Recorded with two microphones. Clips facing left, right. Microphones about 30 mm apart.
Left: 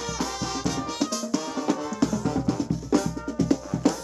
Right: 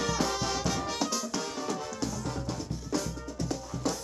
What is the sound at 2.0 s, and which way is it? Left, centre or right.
Music, left.